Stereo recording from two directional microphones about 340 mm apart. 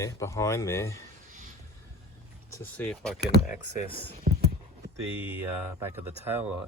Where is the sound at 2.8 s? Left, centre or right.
Centre.